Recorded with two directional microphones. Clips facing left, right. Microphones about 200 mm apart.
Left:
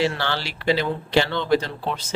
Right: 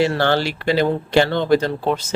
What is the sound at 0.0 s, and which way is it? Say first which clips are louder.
Speech: right 6 dB; 50° right (ahead or behind).